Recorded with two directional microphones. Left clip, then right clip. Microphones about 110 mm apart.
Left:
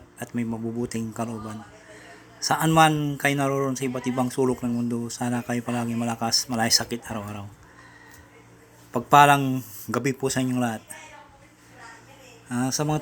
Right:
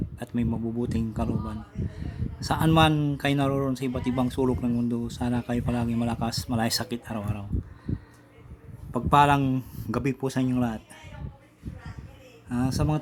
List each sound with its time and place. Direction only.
0.2 s speech: 40° right (ahead or behind)
8.9 s speech: 25° right (ahead or behind)
9.5 s speech: 35° right (ahead or behind)
9.9 s speech: 25° right (ahead or behind)
12.5 s speech: 25° right (ahead or behind)